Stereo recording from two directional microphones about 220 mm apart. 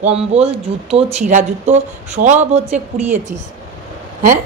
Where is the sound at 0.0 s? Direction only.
30° right (ahead or behind).